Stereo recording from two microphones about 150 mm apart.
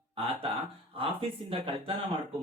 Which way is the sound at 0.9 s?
35° right (ahead or behind).